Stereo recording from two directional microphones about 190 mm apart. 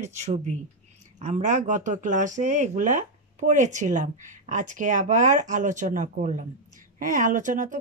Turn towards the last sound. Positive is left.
turn(degrees=-40)  # may be behind; listen again after turning